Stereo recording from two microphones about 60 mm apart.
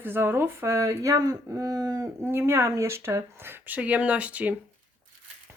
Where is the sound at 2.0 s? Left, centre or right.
Right.